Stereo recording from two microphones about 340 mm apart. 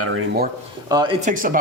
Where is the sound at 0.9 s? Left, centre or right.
Centre.